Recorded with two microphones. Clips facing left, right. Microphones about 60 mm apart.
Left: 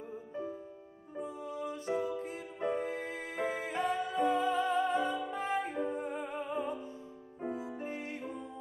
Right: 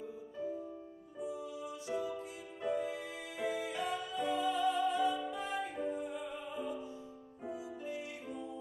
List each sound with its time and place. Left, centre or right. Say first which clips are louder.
1.1 s music: left 2 dB; left